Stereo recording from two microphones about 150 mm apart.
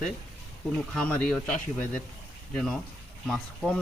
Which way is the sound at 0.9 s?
5° left (ahead or behind).